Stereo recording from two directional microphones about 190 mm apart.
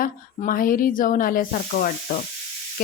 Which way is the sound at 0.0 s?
45° left (ahead or behind).